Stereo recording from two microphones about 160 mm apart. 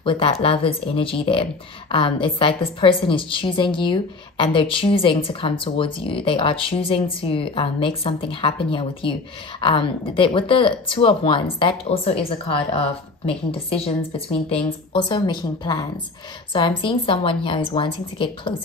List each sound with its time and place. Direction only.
0.0 s speech: 35° left (ahead or behind)